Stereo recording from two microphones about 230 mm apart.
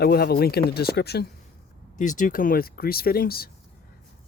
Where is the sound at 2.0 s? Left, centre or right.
Left.